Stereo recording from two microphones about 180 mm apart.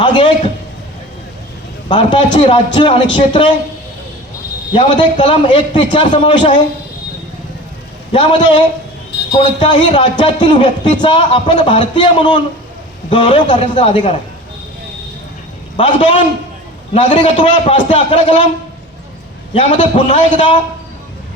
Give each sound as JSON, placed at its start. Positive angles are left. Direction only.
{"t": 0.0, "sound": "a man's voice", "side_deg": 25}
{"t": 1.9, "sound": "a man's voice", "side_deg": 25}
{"t": 4.7, "sound": "a man's voice", "side_deg": 25}
{"t": 8.1, "sound": "a man's voice", "side_deg": 25}
{"t": 15.8, "sound": "a man's voice", "side_deg": 30}
{"t": 19.5, "sound": "a man's voice", "side_deg": 30}